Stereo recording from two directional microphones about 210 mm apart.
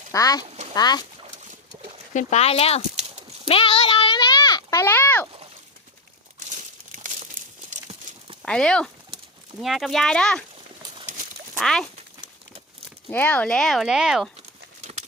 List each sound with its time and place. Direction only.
0.1 s speech: 15° left (ahead or behind)
2.1 s speech: 30° left (ahead or behind)
2.9 s dog: 30° right (ahead or behind)
3.5 s a child's voice: 25° left (ahead or behind); by 5.3 s 10° left (ahead or behind)
6.9 s crumpling: 35° right (ahead or behind)
7.9 s horse: 30° right (ahead or behind)
8.4 s speech: 5° left (ahead or behind)
11.5 s speech: 5° left (ahead or behind)
13.1 s speech: 5° left (ahead or behind)